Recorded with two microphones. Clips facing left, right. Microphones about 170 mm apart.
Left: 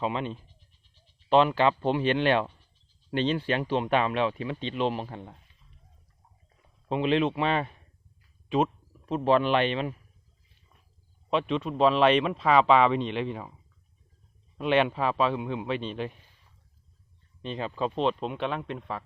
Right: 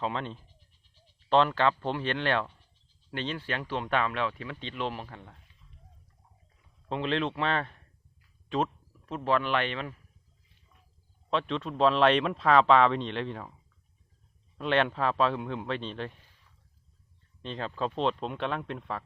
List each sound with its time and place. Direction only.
0.0 s speech: 10° left (ahead or behind)
6.8 s speech: 15° left (ahead or behind)
11.3 s speech: 10° left (ahead or behind)
14.6 s speech: 10° left (ahead or behind)
17.4 s speech: 5° left (ahead or behind)